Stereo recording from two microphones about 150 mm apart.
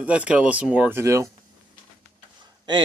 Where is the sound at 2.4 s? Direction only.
30° right (ahead or behind).